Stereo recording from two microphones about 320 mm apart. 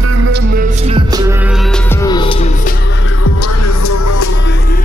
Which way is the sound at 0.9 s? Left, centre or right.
Centre.